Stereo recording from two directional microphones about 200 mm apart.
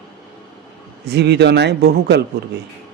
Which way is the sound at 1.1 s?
55° right (ahead or behind).